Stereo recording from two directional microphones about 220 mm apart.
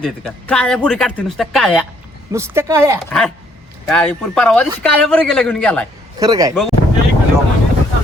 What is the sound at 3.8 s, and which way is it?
Speech, 5° left (ahead or behind).